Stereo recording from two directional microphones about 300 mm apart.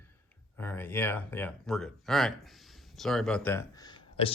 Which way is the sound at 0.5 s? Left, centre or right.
Centre.